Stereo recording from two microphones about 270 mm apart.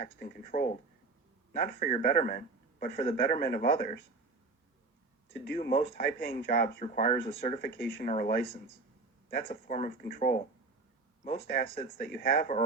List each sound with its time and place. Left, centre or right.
0.2 s a man's voice: left
5.5 s a man's voice: left
9.5 s a man's voice: left